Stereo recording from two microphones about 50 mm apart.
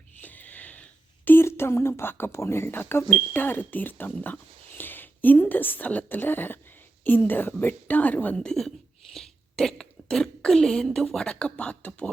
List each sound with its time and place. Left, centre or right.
0.2 s a sound: left
1.2 s a sound: left
1.5 s a woman's voice: left
8.4 s a woman's voice: centre
9.1 s throat clearing: centre
11.2 s speech: centre